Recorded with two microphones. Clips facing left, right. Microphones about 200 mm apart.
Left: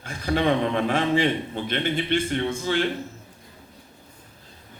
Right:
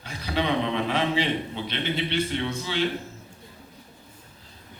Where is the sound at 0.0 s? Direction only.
50° left (ahead or behind).